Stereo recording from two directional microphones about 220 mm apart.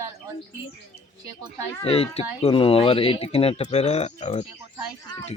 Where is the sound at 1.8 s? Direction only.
25° left (ahead or behind).